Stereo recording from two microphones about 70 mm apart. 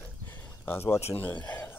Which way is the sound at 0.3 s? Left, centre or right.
Left.